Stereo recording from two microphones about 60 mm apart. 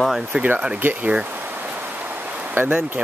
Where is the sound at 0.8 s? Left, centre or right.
Right.